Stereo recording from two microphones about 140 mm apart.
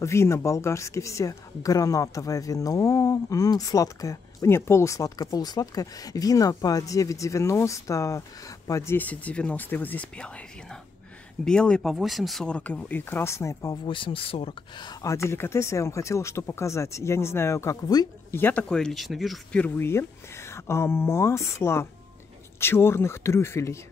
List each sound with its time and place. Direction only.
0.0 s speech: 20° left (ahead or behind)
11.4 s speech: 5° left (ahead or behind); by 13.7 s 20° left (ahead or behind)
13.8 s speech: 40° left (ahead or behind)
18.3 s speech: 15° left (ahead or behind)
19.6 s speech: 15° left (ahead or behind)